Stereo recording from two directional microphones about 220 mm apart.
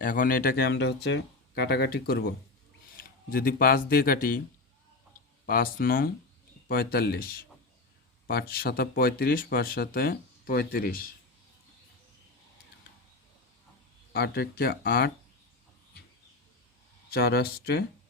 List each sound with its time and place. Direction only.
0.0 s speech: 40° left (ahead or behind)
5.5 s speech: 40° left (ahead or behind)
8.3 s speech: 45° left (ahead or behind)
14.1 s speech: 45° left (ahead or behind)
17.1 s speech: 45° left (ahead or behind)